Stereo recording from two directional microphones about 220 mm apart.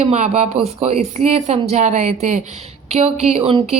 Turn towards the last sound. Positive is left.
turn(degrees=-25)  # may be behind; listen again after turning